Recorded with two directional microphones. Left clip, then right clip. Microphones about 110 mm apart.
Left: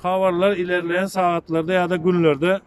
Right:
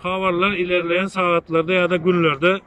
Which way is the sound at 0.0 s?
60° left (ahead or behind).